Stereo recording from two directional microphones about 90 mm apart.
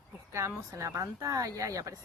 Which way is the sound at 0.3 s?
30° right (ahead or behind).